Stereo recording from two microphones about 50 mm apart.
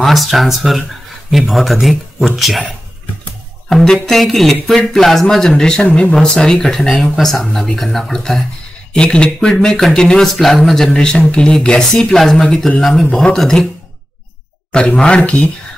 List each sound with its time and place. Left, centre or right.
0.0 s speech: centre
3.7 s speech: centre
7.1 s speech: centre
14.7 s speech: centre